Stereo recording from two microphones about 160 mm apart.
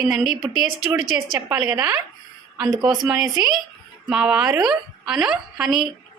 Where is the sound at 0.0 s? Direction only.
5° right (ahead or behind).